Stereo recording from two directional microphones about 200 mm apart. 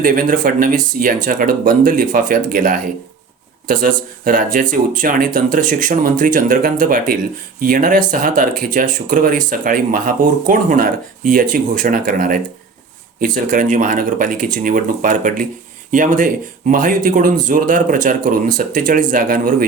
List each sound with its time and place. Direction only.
0.0 s speech: 45° right (ahead or behind)